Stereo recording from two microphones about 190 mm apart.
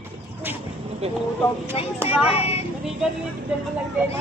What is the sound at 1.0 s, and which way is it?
Speech, 30° right (ahead or behind).